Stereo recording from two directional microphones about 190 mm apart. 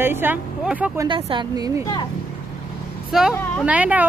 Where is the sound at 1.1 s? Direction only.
25° right (ahead or behind).